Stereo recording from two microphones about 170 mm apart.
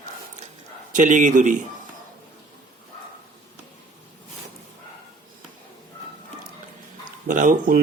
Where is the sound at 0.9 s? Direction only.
50° right (ahead or behind).